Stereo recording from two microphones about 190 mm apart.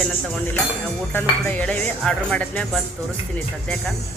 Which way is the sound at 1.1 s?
10° left (ahead or behind).